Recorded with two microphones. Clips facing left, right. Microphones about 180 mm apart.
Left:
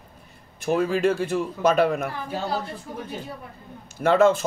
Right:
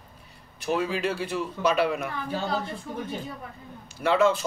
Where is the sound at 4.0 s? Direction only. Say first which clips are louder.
Left 4 dB; 45° left (ahead or behind).